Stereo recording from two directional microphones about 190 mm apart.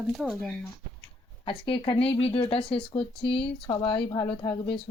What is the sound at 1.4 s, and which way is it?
Speech, 25° left (ahead or behind).